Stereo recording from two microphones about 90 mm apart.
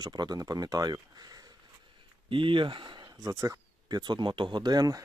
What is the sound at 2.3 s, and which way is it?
Speech, 70° right (ahead or behind).